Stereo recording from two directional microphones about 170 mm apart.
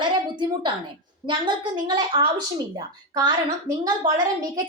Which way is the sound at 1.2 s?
25° right (ahead or behind).